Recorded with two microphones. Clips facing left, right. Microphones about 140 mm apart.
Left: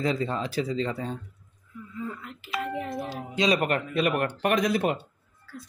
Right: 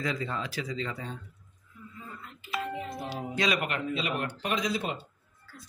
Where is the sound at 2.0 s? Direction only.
85° left; by 3.0 s 60° left (ahead or behind).